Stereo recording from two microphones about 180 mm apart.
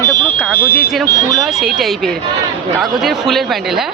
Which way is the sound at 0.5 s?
55° left (ahead or behind).